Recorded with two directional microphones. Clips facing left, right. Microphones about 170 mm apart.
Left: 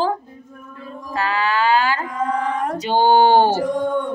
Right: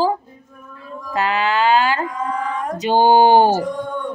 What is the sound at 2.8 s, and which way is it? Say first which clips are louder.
Speech: right 2 dB; 15° right (ahead or behind).